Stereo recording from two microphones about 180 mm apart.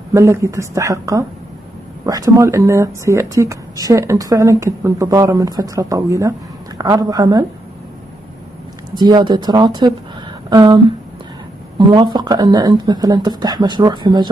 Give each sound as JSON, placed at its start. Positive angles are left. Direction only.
{"t": 0.1, "sound": "speech", "side_deg": -15}
{"t": 8.9, "sound": "speech", "side_deg": -25}
{"t": 11.8, "sound": "speech", "side_deg": -25}